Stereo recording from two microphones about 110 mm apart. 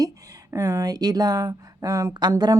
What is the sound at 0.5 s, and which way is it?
Speech, 30° right (ahead or behind).